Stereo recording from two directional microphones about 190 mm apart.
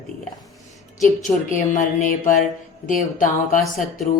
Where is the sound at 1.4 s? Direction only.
45° left (ahead or behind).